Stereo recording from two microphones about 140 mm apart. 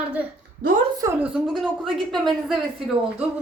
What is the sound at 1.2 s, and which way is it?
A woman's voice, 5° right (ahead or behind).